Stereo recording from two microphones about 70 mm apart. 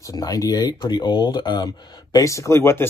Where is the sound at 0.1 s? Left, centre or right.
Left.